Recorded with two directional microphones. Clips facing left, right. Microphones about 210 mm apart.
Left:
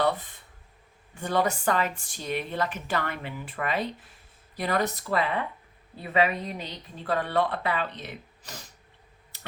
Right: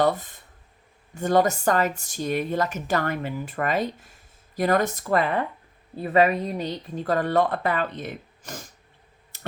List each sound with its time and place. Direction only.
1.1 s speech: 45° right (ahead or behind)